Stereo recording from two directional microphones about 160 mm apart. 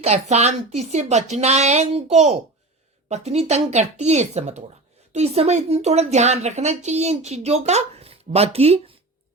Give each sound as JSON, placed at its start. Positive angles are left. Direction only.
{"t": 0.0, "sound": "a woman's voice", "side_deg": -45}